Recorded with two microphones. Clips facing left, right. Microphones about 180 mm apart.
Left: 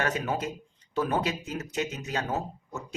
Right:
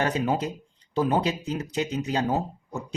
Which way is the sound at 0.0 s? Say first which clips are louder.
Right 4 dB; 35° right (ahead or behind).